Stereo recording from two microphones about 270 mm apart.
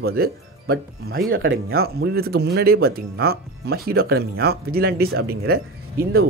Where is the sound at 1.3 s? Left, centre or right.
Right.